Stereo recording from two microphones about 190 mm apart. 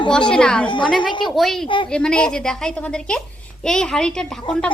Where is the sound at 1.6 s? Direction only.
25° left (ahead or behind).